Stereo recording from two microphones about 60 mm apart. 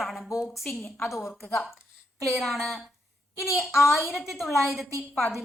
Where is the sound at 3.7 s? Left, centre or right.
Left.